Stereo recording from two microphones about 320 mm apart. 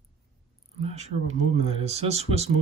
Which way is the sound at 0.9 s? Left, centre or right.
Centre.